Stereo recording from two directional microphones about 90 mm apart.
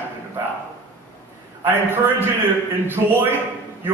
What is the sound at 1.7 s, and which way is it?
Speech, 25° right (ahead or behind).